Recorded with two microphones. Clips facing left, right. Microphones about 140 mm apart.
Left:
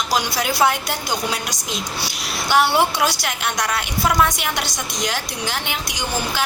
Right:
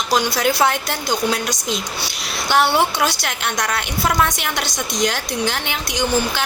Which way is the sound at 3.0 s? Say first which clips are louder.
Even; 5° left (ahead or behind).